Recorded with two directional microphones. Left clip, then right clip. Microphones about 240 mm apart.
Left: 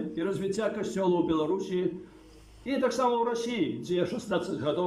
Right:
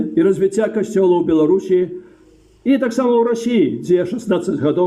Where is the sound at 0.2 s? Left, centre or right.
Right.